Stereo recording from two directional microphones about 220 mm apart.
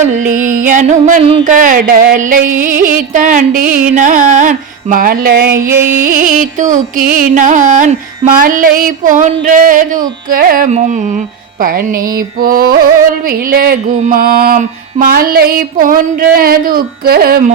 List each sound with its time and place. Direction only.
0.1 s carnatic music: 35° right (ahead or behind)
5.7 s music: 10° right (ahead or behind)
6.1 s carnatic music: 40° right (ahead or behind)
12.4 s carnatic music: 40° right (ahead or behind)